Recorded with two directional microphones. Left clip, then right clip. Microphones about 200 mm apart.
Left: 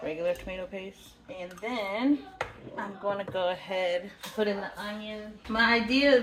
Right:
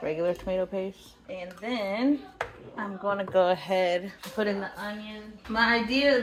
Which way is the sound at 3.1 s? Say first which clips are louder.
Right 7 dB; 40° right (ahead or behind).